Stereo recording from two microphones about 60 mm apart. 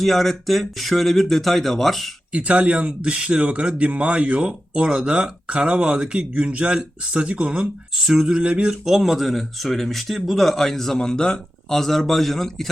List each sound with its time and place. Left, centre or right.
0.0 s speech: centre
2.3 s speech: right; by 8.4 s centre
8.4 s speech: centre
8.8 s speech: centre